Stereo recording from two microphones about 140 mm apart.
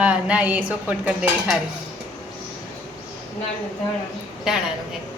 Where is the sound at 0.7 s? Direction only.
10° right (ahead or behind).